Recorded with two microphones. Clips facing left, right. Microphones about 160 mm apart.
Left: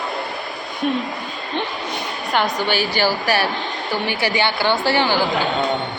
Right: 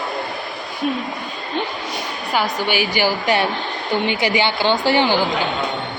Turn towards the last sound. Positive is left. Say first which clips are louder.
# right 2 dB
turn(degrees=-15)  # may be behind; listen again after turning